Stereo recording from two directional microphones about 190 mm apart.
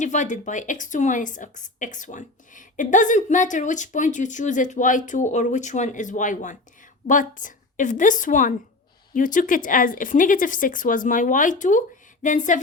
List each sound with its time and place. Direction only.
0.0 s a woman's voice: 40° left (ahead or behind)